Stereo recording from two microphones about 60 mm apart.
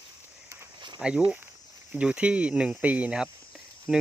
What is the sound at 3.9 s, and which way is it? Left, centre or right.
Speech, centre.